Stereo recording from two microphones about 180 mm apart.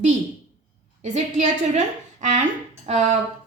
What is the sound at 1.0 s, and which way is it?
A woman's voice, 40° right (ahead or behind).